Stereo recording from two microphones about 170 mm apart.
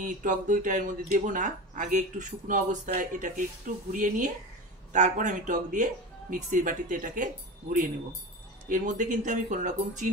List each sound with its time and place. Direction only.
0.0 s speech: 50° right (ahead or behind)
8.6 s speech: 50° right (ahead or behind)